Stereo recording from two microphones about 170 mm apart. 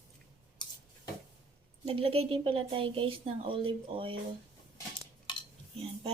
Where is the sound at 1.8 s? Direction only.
35° right (ahead or behind).